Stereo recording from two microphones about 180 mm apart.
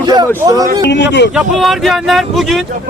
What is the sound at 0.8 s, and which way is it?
Speech, 70° left (ahead or behind).